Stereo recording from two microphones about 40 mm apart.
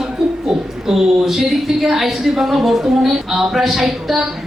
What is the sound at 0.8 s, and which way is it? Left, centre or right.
Speech, centre.